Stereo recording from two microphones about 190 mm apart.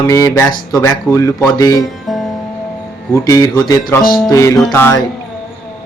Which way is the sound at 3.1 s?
15° left (ahead or behind).